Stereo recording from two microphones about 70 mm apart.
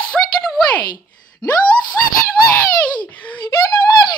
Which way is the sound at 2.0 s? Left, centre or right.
Left.